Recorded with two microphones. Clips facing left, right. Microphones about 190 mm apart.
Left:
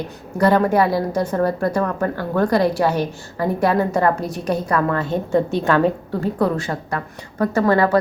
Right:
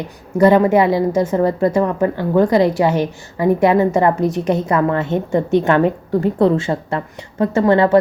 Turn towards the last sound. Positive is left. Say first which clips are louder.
# right 3 dB
turn(degrees=-25)  # may be behind; listen again after turning